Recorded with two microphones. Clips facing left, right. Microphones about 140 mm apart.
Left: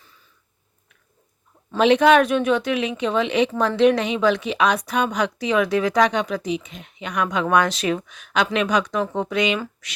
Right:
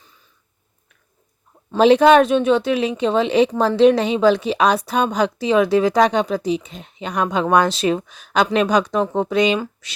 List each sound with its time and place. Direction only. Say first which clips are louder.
1.8 s speech: right 3 dB; 35° right (ahead or behind)